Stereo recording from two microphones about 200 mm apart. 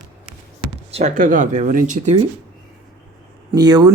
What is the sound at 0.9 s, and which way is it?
Speech, 40° right (ahead or behind).